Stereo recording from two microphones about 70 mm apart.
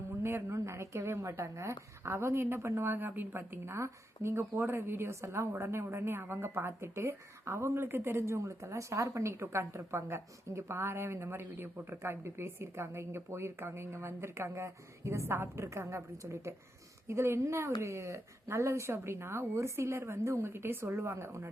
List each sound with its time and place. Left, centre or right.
0.2 s a woman's voice: right